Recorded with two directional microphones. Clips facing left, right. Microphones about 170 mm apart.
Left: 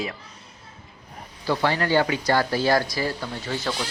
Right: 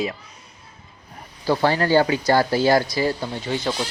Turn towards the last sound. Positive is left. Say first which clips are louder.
# right 4 dB
turn(degrees=-20)  # may be behind; listen again after turning